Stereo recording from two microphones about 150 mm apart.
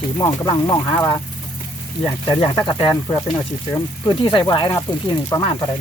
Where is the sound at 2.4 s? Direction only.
30° left (ahead or behind).